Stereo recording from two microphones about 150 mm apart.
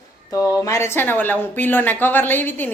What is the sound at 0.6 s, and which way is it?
Speech, 20° left (ahead or behind).